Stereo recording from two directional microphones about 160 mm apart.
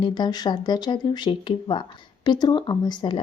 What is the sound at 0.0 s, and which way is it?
Speech, 25° left (ahead or behind).